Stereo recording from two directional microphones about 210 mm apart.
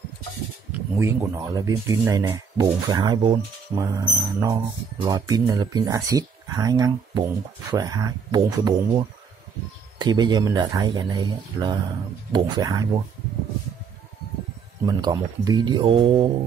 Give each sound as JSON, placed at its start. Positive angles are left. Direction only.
{"t": 0.9, "sound": "speech", "side_deg": -15}
{"t": 14.9, "sound": "speech", "side_deg": -20}